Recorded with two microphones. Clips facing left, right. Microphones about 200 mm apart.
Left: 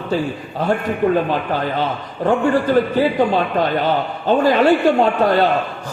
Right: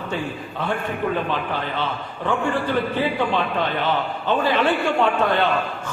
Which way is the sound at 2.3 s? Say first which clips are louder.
Left 7 dB; 40° left (ahead or behind).